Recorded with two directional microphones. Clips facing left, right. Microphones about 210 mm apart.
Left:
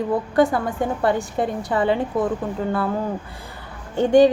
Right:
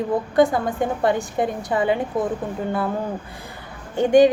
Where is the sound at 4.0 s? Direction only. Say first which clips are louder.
Even; 15° right (ahead or behind).